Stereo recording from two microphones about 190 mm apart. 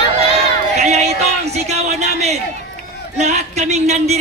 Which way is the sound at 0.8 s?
35° right (ahead or behind).